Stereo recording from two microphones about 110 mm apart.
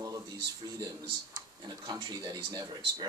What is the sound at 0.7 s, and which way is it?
Speech, 35° right (ahead or behind).